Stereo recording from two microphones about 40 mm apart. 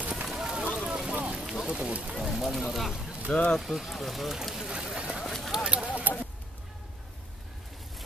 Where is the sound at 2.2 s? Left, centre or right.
Centre.